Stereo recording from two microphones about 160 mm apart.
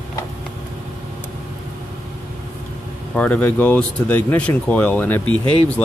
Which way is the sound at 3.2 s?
10° left (ahead or behind).